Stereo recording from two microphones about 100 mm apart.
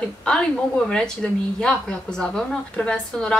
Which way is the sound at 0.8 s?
5° left (ahead or behind).